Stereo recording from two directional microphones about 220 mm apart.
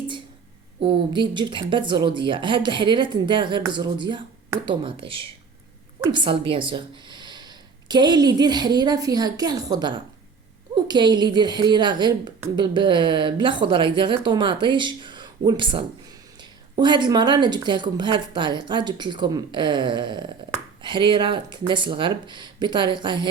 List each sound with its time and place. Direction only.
0.9 s a woman's voice: 20° right (ahead or behind)